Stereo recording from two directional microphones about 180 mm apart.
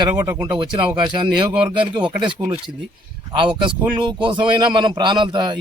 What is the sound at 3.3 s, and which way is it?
Speech, 25° right (ahead or behind).